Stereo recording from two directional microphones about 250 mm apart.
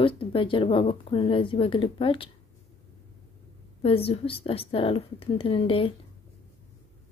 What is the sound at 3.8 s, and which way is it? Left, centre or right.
A woman's voice, left.